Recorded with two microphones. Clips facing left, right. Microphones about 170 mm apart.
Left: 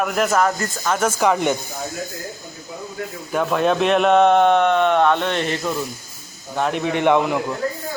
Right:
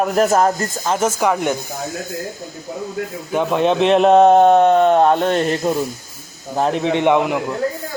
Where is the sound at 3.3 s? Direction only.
20° right (ahead or behind).